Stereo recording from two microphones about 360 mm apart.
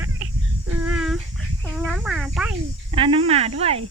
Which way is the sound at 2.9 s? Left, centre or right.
Centre.